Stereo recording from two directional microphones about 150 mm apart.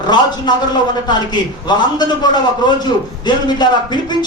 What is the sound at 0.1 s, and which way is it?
Speech, 30° left (ahead or behind).